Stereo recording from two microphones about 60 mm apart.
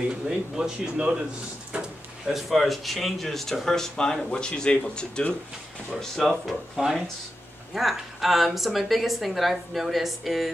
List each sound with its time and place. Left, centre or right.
0.1 s speech: centre
2.2 s speech: centre
5.9 s a woman's voice: centre